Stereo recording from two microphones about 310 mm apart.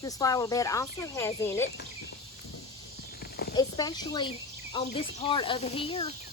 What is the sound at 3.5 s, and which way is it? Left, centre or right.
Speech, centre.